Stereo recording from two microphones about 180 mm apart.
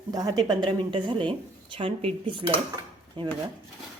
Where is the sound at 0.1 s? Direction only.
20° right (ahead or behind).